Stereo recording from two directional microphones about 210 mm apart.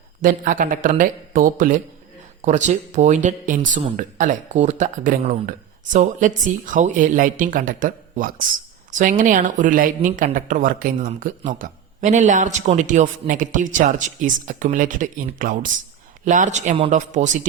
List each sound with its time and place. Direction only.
0.2 s speech: 40° right (ahead or behind)